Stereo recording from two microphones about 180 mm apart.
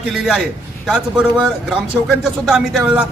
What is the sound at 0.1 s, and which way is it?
A man's voice, 5° right (ahead or behind).